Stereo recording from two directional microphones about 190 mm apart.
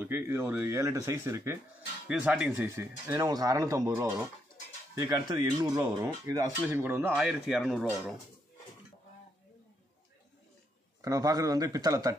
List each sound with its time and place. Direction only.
0.0 s speech: 10° right (ahead or behind)
11.0 s speech: 20° right (ahead or behind)